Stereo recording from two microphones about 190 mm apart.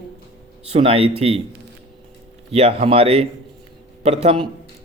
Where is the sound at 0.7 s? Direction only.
30° right (ahead or behind).